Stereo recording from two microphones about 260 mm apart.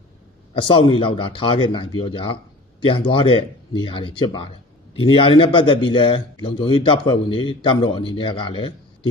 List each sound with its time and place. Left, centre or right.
0.6 s a man's voice: centre